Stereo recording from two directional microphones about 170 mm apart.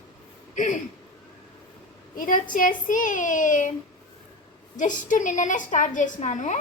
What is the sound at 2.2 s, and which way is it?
A woman's voice, 50° left (ahead or behind).